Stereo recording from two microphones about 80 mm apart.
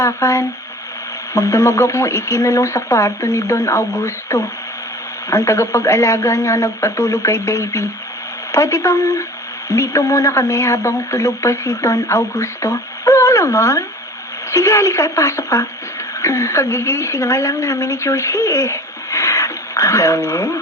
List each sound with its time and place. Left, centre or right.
0.0 s a woman's voice: left